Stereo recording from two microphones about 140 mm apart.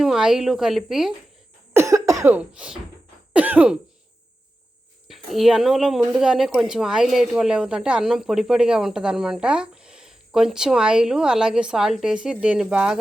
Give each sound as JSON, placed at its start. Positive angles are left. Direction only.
{"t": 0.0, "sound": "a woman's voice", "side_deg": -5}
{"t": 1.7, "sound": "cough", "side_deg": -20}
{"t": 2.3, "sound": "speech", "side_deg": -10}
{"t": 5.0, "sound": "speech", "side_deg": 0}